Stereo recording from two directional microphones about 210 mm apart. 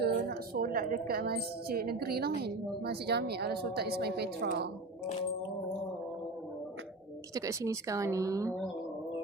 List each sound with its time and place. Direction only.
0.0 s a woman's voice: 50° right (ahead or behind)
7.3 s a woman's voice: 15° right (ahead or behind)